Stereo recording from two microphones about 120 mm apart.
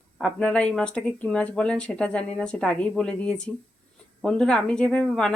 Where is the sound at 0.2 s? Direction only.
5° left (ahead or behind).